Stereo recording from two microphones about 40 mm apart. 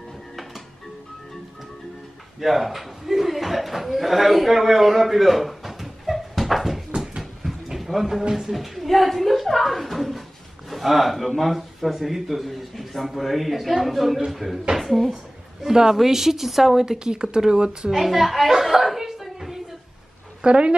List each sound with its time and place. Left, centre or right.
2.4 s a man's voice: centre
7.0 s a sound: centre
8.3 s speech: centre
15.6 s speech: centre
17.8 s speech: centre
18.5 s a sound: centre
20.4 s a woman's voice: right